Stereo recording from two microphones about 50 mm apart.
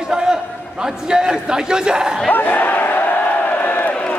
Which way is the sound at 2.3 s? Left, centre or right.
Left.